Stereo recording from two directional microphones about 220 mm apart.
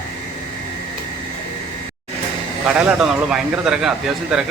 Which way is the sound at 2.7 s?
5° right (ahead or behind).